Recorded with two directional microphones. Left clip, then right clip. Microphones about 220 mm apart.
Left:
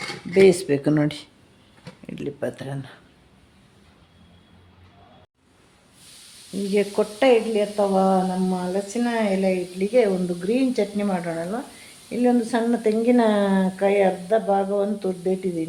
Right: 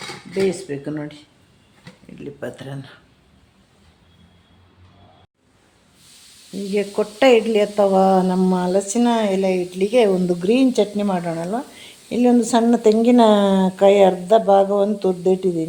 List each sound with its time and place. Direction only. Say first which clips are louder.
0.4 s speech: left 6 dB; 50° left (ahead or behind)
2.0 s speech: left 4 dB; 25° left (ahead or behind)
2.4 s speech: right 1 dB; 10° left (ahead or behind)
6.7 s sizzle: right 1 dB; centre (ahead or behind)
7.2 s speech: right 4 dB; 20° right (ahead or behind)
7.5 s speech: right 5 dB; 35° right (ahead or behind)